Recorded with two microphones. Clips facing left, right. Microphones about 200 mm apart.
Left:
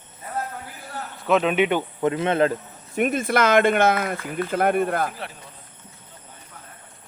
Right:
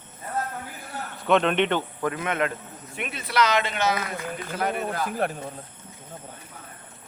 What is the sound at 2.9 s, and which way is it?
Speech, 45° left (ahead or behind).